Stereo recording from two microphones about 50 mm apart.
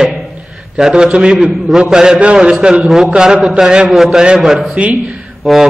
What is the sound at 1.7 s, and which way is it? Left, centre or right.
A man's voice, centre.